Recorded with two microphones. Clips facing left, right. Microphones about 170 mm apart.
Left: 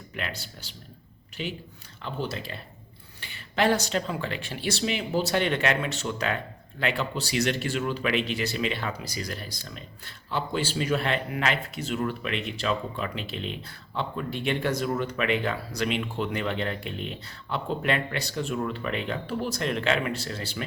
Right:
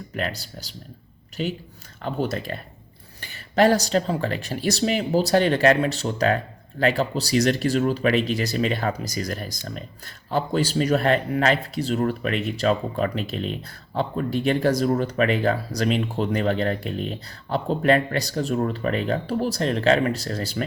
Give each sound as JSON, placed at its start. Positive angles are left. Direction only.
{"t": 0.1, "sound": "speech", "side_deg": -40}